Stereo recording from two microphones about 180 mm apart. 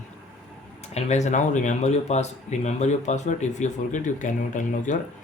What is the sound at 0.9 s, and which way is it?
Speech, 40° left (ahead or behind).